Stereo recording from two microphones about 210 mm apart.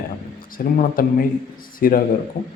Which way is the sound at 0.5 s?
40° left (ahead or behind).